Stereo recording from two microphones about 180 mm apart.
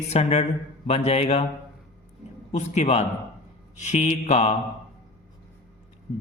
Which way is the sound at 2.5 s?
40° left (ahead or behind).